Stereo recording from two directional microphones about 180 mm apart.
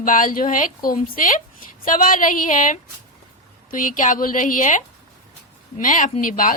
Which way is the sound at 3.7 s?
45° left (ahead or behind).